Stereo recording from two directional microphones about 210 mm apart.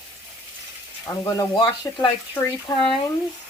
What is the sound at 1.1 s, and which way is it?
Speech, 15° left (ahead or behind).